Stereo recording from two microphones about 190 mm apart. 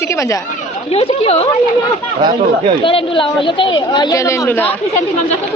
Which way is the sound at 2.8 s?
30° left (ahead or behind).